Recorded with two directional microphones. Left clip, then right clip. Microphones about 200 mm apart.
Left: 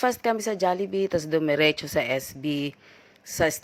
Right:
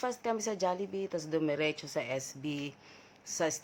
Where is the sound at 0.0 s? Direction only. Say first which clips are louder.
Left 10 dB; 30° left (ahead or behind).